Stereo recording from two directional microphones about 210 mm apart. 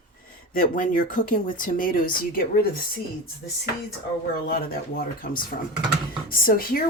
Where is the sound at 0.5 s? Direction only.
40° left (ahead or behind).